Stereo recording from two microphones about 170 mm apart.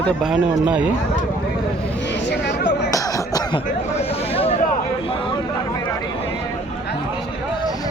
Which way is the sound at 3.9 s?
35° left (ahead or behind).